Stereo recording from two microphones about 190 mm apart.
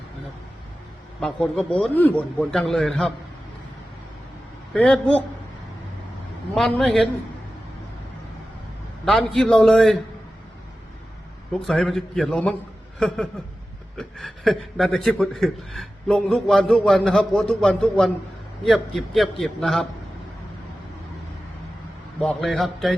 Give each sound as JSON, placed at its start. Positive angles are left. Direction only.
{"t": 1.2, "sound": "a man's voice", "side_deg": 5}
{"t": 4.7, "sound": "a man's voice", "side_deg": 5}
{"t": 6.5, "sound": "a man's voice", "side_deg": 0}
{"t": 9.0, "sound": "a man's voice", "side_deg": 0}
{"t": 11.6, "sound": "a man's voice", "side_deg": 0}
{"t": 22.2, "sound": "a man's voice", "side_deg": 0}